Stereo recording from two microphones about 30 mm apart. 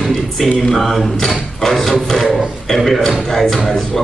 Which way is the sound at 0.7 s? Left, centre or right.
Centre.